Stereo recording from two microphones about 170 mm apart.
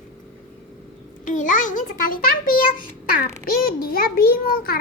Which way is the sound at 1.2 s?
50° left (ahead or behind).